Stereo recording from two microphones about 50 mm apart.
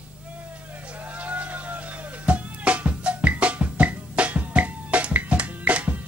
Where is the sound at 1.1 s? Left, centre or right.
Right.